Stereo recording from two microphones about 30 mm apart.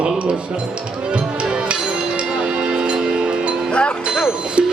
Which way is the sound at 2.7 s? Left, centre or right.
Right.